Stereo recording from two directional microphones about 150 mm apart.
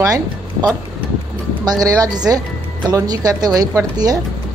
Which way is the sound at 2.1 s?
25° right (ahead or behind).